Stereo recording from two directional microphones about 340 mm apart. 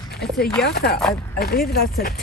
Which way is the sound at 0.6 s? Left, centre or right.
Left.